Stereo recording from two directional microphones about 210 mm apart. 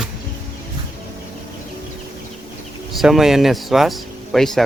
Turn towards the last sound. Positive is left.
turn(degrees=0)  # may be behind; listen again after turning